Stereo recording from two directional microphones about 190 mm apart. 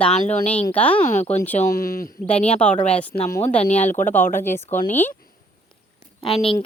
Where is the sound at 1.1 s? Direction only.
35° left (ahead or behind).